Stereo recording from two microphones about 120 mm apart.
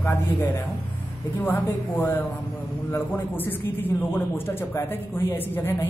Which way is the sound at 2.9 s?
15° left (ahead or behind).